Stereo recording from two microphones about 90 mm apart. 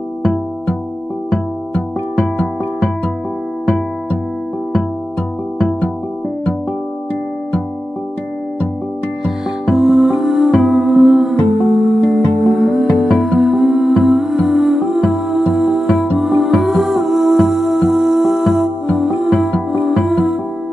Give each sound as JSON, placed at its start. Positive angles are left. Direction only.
{"t": 0.2, "sound": "music", "side_deg": 10}
{"t": 5.6, "sound": "music", "side_deg": 10}
{"t": 9.2, "sound": "music", "side_deg": 0}